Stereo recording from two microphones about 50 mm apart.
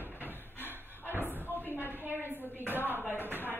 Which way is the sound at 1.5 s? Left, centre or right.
Left.